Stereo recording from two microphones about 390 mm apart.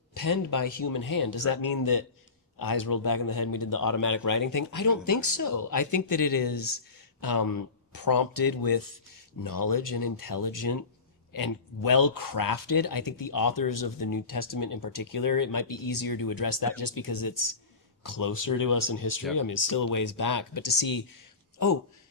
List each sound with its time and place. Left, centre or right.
0.1 s speech: left